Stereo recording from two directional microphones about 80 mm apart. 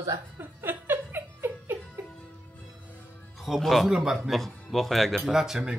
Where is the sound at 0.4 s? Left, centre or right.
Right.